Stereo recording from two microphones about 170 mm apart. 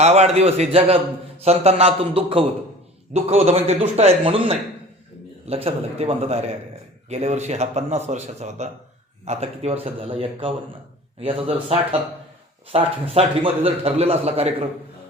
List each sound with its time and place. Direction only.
0.0 s speech: 40° right (ahead or behind)